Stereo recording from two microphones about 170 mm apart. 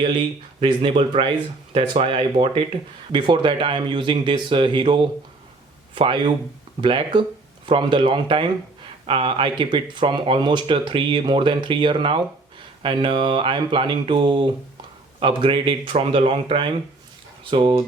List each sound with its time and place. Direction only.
0.6 s speech: 30° right (ahead or behind)